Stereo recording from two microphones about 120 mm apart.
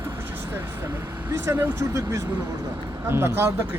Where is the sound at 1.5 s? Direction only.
15° right (ahead or behind).